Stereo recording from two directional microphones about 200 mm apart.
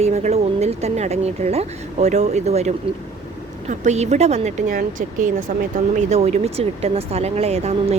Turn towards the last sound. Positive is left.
turn(degrees=-30)  # may be behind; listen again after turning